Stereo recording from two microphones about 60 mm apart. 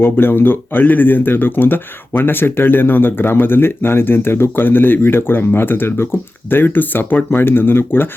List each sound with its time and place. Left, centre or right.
0.0 s speech: left